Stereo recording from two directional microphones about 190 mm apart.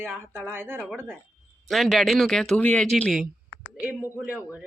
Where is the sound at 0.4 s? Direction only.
10° right (ahead or behind).